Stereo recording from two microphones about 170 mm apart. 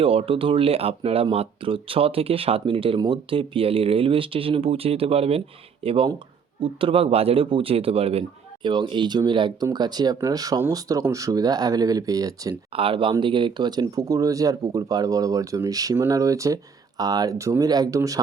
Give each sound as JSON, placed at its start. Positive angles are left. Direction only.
{"t": 0.0, "sound": "speech", "side_deg": -35}
{"t": 12.7, "sound": "speech", "side_deg": -30}